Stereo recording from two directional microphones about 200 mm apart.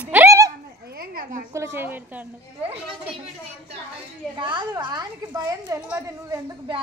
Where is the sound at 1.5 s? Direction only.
15° right (ahead or behind).